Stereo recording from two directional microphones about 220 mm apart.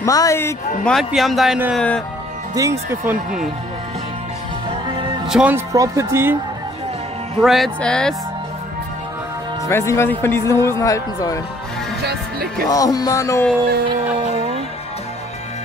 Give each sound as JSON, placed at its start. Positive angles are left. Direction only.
{"t": 0.0, "sound": "speech", "side_deg": 15}
{"t": 0.9, "sound": "speech", "side_deg": 0}
{"t": 2.5, "sound": "speech", "side_deg": -15}
{"t": 4.6, "sound": "music", "side_deg": -20}
{"t": 5.3, "sound": "speech", "side_deg": -5}
{"t": 7.4, "sound": "speech", "side_deg": 0}
{"t": 9.7, "sound": "speech", "side_deg": 10}
{"t": 12.0, "sound": "speech", "side_deg": -45}
{"t": 12.6, "sound": "speech", "side_deg": 15}